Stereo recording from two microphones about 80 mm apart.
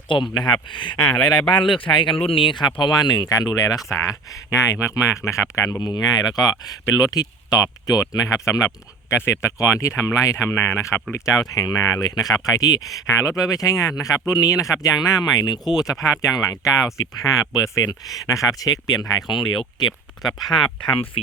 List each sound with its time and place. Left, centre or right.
0.1 s speech: left
5.8 s speech: left
11.3 s speech: left
16.3 s speech: left
19.3 s speech: left
20.2 s speech: centre